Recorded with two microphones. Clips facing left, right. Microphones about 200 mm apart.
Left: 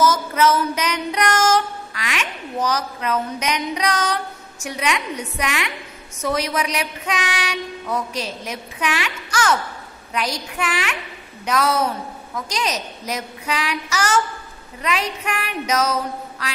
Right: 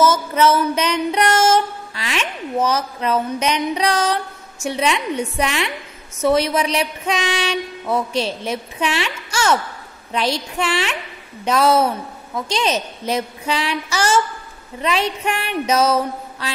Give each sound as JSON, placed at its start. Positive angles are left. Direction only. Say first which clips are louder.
{"t": 0.0, "sound": "music", "louder": "right 2 dB", "side_deg": -25}
{"t": 6.2, "sound": "speech", "louder": "right 6 dB", "side_deg": -25}